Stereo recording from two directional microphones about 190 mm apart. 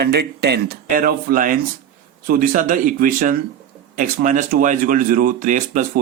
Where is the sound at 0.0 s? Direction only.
60° right (ahead or behind).